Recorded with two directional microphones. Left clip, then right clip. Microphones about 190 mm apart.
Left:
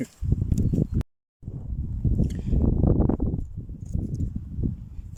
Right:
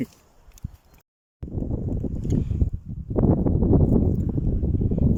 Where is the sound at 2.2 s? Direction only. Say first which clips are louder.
Right 6 dB; centre (ahead or behind).